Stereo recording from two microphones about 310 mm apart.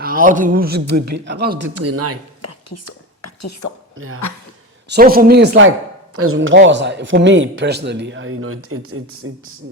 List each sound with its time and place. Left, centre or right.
0.0 s speech: right
1.7 s speech: right
2.4 s whispering: left
3.9 s speech: right
4.9 s speech: right